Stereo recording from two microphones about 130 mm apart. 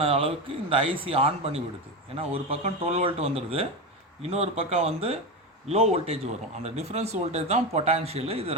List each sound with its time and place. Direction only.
0.0 s speech: 45° right (ahead or behind)